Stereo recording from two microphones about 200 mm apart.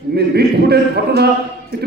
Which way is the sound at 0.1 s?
55° right (ahead or behind).